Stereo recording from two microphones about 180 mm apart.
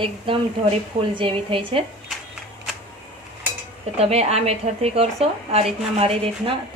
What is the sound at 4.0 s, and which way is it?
A woman's voice, 35° right (ahead or behind).